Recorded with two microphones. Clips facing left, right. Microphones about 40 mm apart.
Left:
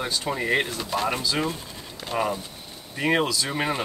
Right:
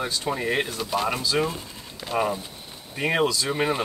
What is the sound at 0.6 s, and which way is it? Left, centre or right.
Speech, centre.